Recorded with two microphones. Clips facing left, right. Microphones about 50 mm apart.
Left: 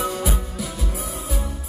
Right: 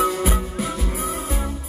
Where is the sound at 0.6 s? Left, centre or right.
Right.